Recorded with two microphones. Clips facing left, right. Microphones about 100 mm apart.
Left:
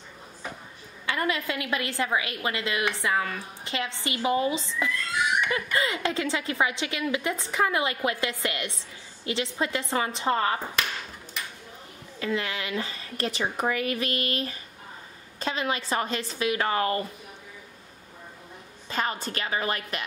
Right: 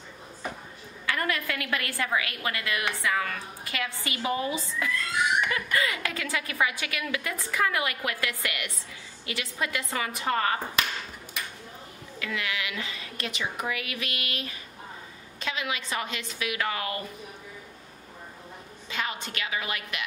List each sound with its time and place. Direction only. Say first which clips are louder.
1.0 s a woman's voice: left 1 dB; 20° left (ahead or behind)
12.2 s a woman's voice: left 3 dB; 35° left (ahead or behind)
18.9 s a woman's voice: left 4 dB; 40° left (ahead or behind)